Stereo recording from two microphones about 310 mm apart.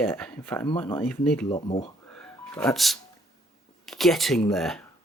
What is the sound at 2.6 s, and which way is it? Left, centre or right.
Speech, centre.